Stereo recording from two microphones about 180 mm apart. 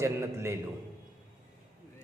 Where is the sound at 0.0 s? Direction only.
15° right (ahead or behind).